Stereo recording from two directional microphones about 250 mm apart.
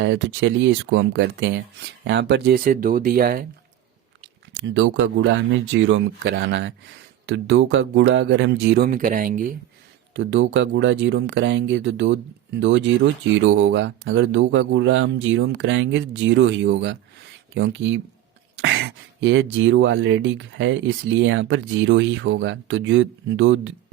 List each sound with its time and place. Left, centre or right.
0.0 s speech: right
4.6 s speech: right
10.2 s speech: right